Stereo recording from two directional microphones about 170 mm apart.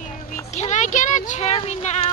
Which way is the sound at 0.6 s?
45° left (ahead or behind).